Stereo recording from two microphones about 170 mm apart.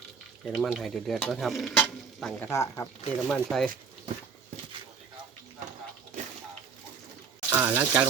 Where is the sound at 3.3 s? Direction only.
5° left (ahead or behind).